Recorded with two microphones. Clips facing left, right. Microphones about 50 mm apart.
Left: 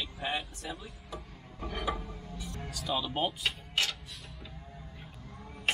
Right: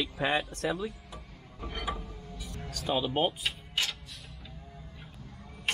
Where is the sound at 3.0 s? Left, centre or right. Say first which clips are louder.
Right 4 dB; right.